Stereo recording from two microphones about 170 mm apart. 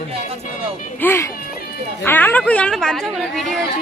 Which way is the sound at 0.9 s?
15° left (ahead or behind).